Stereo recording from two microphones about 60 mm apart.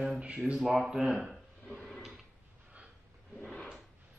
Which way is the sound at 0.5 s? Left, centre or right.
Centre.